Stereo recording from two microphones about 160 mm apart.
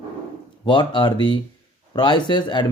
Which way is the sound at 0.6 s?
30° left (ahead or behind).